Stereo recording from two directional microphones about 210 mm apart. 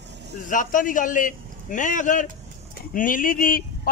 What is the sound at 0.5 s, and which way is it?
A man's voice, 40° left (ahead or behind).